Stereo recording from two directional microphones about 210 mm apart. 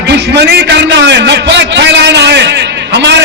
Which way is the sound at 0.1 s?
55° right (ahead or behind).